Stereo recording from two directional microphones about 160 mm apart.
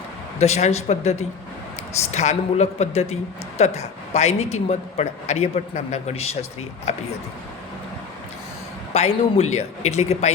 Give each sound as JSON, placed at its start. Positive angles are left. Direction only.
{"t": 0.3, "sound": "a man's voice", "side_deg": 45}
{"t": 8.9, "sound": "a man's voice", "side_deg": 40}